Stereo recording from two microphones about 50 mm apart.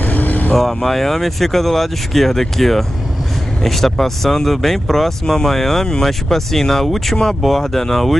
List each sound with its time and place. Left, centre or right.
0.0 s vehicle: left
0.8 s speech: centre